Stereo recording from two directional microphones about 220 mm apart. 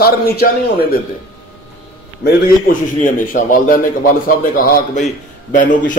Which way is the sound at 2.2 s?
35° left (ahead or behind).